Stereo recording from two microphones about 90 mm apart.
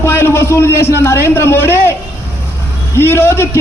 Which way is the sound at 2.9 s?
25° left (ahead or behind).